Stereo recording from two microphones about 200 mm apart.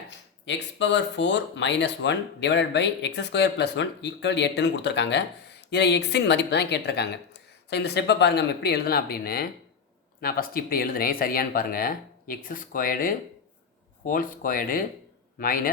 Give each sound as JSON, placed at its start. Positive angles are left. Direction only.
{"t": 0.4, "sound": "speech", "side_deg": 65}